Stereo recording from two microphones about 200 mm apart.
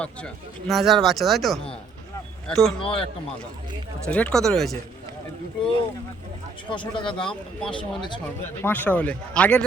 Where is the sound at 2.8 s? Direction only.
25° left (ahead or behind).